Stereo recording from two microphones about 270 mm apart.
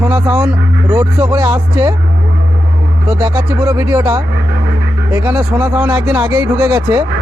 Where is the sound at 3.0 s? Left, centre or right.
Centre.